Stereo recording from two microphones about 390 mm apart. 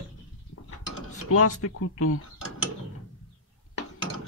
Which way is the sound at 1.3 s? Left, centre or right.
Left.